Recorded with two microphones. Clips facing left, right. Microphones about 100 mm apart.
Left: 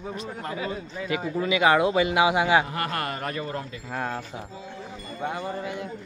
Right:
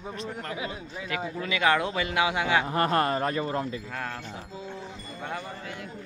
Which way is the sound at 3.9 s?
20° left (ahead or behind).